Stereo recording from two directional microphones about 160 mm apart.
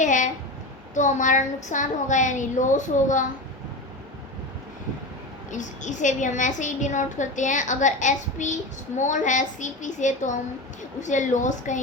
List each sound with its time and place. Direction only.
0.0 s a woman's voice: 50° left (ahead or behind)
5.5 s a child's voice: 50° left (ahead or behind)